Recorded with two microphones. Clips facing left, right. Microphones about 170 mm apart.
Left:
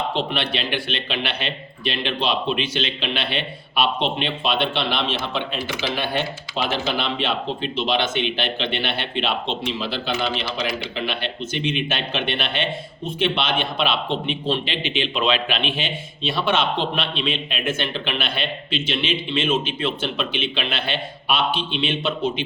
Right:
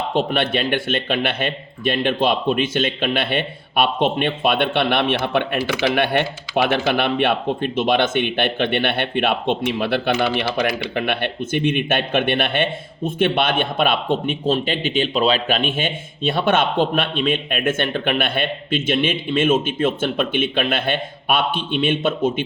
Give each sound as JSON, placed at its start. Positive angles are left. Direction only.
{"t": 0.1, "sound": "speech", "side_deg": -50}